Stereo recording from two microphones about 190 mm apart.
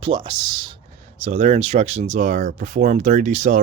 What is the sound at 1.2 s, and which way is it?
Speech, 35° right (ahead or behind).